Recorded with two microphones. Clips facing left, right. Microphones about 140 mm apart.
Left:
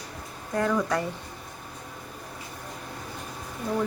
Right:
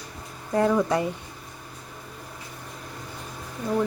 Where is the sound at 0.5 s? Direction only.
25° right (ahead or behind).